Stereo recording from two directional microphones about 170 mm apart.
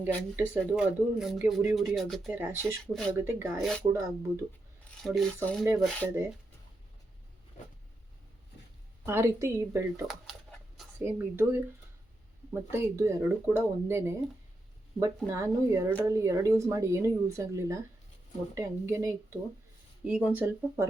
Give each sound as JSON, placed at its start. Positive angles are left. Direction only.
{"t": 0.0, "sound": "speech", "side_deg": -10}
{"t": 2.3, "sound": "speech", "side_deg": -10}
{"t": 2.8, "sound": "speech", "side_deg": 5}
{"t": 3.2, "sound": "speech", "side_deg": -15}
{"t": 3.6, "sound": "speech", "side_deg": 5}
{"t": 3.9, "sound": "speech", "side_deg": -15}
{"t": 5.0, "sound": "speech", "side_deg": 0}
{"t": 9.0, "sound": "speech", "side_deg": -15}
{"t": 12.7, "sound": "speech", "side_deg": -15}